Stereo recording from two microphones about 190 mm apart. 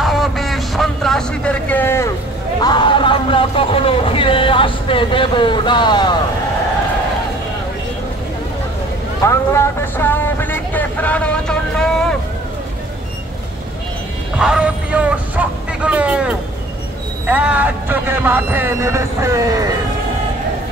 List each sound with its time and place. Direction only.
0.0 s vehicle: centre (ahead or behind)
2.6 s a sound: 25° left (ahead or behind)
9.2 s vehicle: 15° left (ahead or behind)
14.4 s vehicle: 5° right (ahead or behind)
17.3 s speech: 10° right (ahead or behind)